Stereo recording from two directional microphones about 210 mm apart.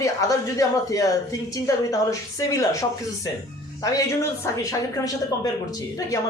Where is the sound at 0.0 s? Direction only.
15° left (ahead or behind).